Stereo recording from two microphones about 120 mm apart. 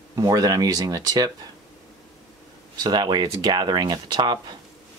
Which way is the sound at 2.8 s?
35° right (ahead or behind).